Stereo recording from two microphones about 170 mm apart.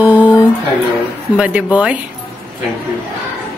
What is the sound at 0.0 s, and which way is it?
Music, 10° right (ahead or behind).